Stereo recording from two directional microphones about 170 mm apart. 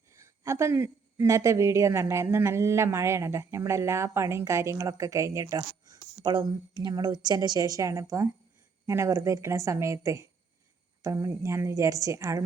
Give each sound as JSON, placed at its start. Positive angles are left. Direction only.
{"t": 0.1, "sound": "a woman's voice", "side_deg": -15}